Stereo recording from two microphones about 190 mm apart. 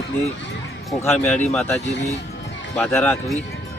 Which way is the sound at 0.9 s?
10° left (ahead or behind).